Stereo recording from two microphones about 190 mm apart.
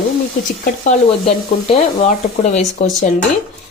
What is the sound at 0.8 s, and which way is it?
Stir, 40° left (ahead or behind).